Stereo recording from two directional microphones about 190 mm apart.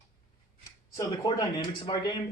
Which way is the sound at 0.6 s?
15° left (ahead or behind).